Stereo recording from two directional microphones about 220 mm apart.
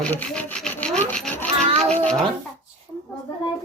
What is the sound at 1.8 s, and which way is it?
Speech, 5° left (ahead or behind).